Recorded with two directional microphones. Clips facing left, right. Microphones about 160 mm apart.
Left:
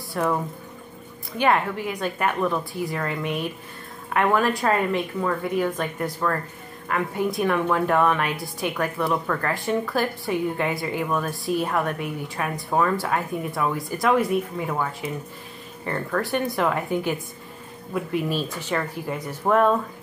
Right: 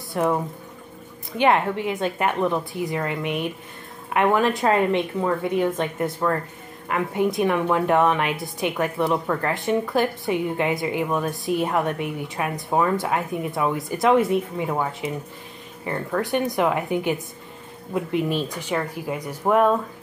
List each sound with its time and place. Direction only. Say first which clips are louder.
0.1 s speech: right 2 dB; 20° right (ahead or behind)
1.4 s a woman's voice: right 2 dB; 25° right (ahead or behind)